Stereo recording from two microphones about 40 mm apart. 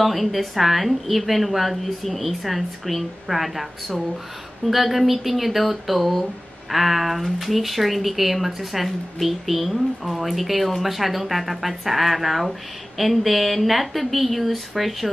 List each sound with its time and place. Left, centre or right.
0.0 s speech: centre